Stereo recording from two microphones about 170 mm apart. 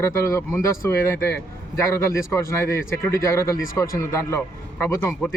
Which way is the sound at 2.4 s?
55° left (ahead or behind).